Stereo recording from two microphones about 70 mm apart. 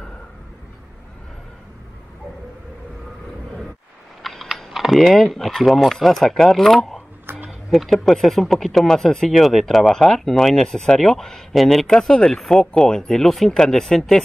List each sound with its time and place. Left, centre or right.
4.2 s speech: centre
7.2 s a sound: centre
7.7 s speech: centre